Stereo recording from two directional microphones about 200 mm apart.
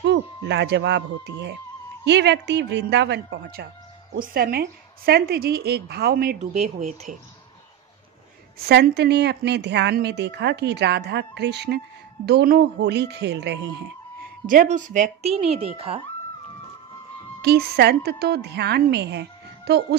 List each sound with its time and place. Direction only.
0.0 s a woman's voice: 60° right (ahead or behind)
6.6 s speech: 35° right (ahead or behind)
8.6 s a woman's voice: 55° right (ahead or behind)
14.4 s speech: 40° right (ahead or behind)
17.4 s a woman's voice: 55° right (ahead or behind)